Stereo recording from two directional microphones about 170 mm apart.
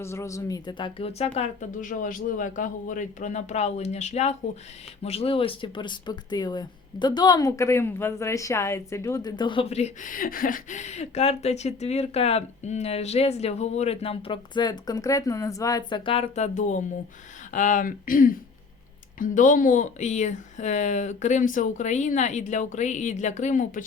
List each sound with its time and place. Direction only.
0.0 s speech: 15° left (ahead or behind); by 23.8 s 50° left (ahead or behind)